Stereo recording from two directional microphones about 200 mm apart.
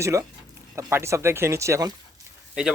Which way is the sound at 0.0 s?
15° right (ahead or behind).